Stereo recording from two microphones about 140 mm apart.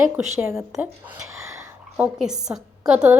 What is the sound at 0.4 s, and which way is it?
Speech, 20° right (ahead or behind).